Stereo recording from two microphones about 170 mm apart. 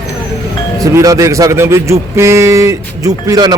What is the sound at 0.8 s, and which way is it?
Speech, 20° right (ahead or behind).